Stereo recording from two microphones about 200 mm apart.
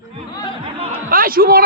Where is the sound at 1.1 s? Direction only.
45° right (ahead or behind).